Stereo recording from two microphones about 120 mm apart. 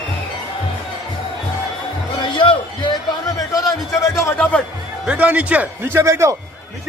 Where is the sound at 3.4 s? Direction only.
30° left (ahead or behind).